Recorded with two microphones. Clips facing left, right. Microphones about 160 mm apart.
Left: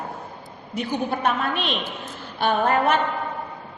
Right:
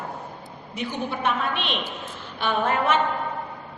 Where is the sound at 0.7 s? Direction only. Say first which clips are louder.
Left 4 dB; 40° left (ahead or behind).